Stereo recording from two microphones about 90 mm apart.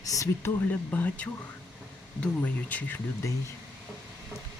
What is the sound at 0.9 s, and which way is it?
Speech, 20° left (ahead or behind).